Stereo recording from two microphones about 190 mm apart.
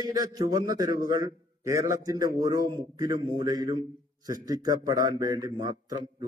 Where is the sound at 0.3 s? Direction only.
20° right (ahead or behind).